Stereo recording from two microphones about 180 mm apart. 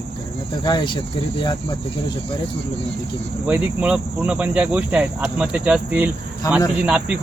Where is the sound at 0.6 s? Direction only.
25° left (ahead or behind).